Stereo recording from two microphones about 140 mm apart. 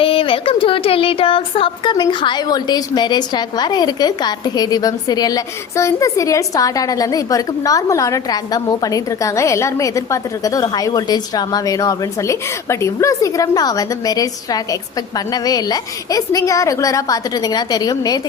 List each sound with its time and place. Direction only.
0.0 s speech: 40° left (ahead or behind)